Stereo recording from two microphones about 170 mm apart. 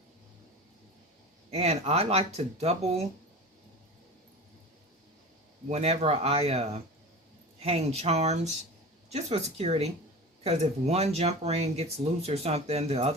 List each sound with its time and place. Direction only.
1.5 s speech: 40° right (ahead or behind)
5.6 s speech: 40° right (ahead or behind)